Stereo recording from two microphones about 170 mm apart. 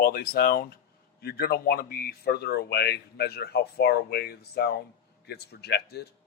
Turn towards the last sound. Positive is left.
turn(degrees=75)  # may be behind; listen again after turning